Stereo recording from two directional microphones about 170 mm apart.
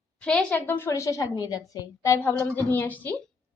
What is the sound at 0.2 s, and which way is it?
A woman's voice, 5° left (ahead or behind).